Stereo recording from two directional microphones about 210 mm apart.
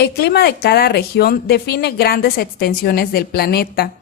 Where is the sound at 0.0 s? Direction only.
50° left (ahead or behind).